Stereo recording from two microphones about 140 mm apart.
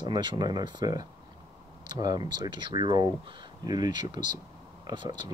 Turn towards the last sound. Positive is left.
turn(degrees=-30)  # may be behind; listen again after turning